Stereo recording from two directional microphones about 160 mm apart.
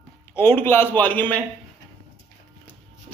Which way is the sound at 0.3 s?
15° left (ahead or behind).